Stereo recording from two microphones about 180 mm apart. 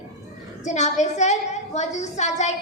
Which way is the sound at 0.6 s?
40° left (ahead or behind).